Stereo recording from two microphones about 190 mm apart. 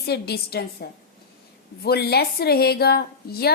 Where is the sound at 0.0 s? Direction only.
60° left (ahead or behind).